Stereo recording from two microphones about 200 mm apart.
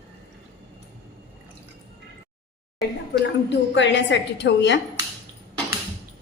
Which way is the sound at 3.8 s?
65° left (ahead or behind).